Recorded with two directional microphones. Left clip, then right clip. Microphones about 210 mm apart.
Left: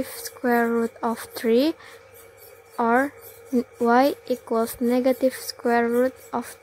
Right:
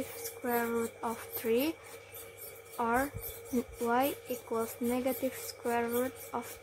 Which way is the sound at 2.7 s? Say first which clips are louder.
Left 10 dB; 30° left (ahead or behind).